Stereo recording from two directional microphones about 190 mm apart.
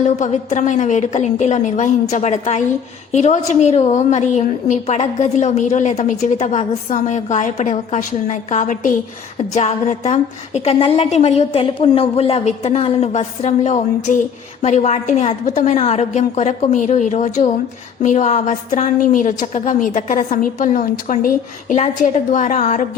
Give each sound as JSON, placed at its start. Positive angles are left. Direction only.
{"t": 0.2, "sound": "a woman's voice", "side_deg": 40}